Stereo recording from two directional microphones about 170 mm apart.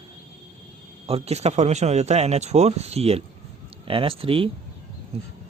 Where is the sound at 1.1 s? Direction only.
35° right (ahead or behind).